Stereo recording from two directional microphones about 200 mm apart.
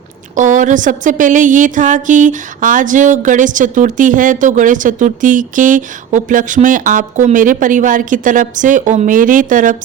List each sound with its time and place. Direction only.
0.3 s a woman's voice: 40° right (ahead or behind)